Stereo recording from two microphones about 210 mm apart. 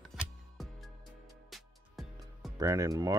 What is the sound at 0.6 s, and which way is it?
Music, centre (ahead or behind).